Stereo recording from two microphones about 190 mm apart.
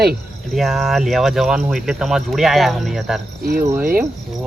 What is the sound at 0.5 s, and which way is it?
Speech, centre (ahead or behind).